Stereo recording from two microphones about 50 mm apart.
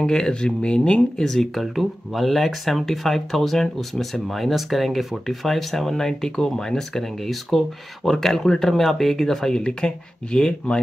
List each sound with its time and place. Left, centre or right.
0.0 s speech: centre
1.2 s speech: centre